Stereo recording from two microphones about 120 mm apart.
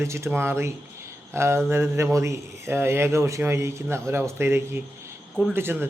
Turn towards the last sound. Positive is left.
turn(degrees=-20)  # may be behind; listen again after turning